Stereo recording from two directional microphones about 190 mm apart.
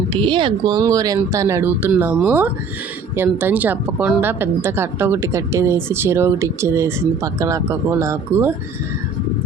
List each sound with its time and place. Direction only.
0.1 s a woman's voice: 25° right (ahead or behind)